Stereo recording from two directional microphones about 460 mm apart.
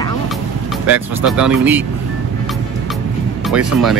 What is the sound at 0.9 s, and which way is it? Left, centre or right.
Speech, centre.